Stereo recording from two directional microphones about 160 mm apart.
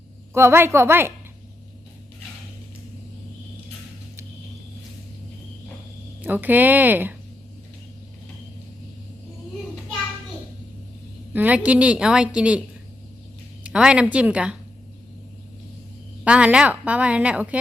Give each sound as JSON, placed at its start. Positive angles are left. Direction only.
{"t": 0.3, "sound": "a woman's voice", "side_deg": -15}
{"t": 6.2, "sound": "a woman's voice", "side_deg": -10}
{"t": 11.3, "sound": "a woman's voice", "side_deg": -10}
{"t": 13.7, "sound": "a woman's voice", "side_deg": -5}
{"t": 16.2, "sound": "a woman's voice", "side_deg": -10}